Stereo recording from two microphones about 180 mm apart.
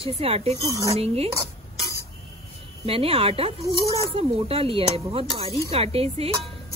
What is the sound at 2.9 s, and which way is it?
Speech, 30° right (ahead or behind).